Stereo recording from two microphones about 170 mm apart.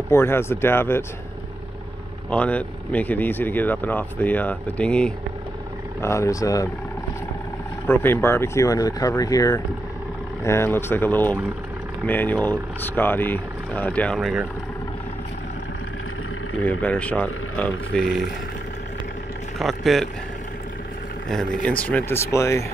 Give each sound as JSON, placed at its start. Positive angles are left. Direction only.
{"t": 0.1, "sound": "speech", "side_deg": 15}
{"t": 2.2, "sound": "speech", "side_deg": 10}
{"t": 7.8, "sound": "speech", "side_deg": 10}
{"t": 16.6, "sound": "speech", "side_deg": 10}
{"t": 19.6, "sound": "speech", "side_deg": 0}
{"t": 21.6, "sound": "speech", "side_deg": 10}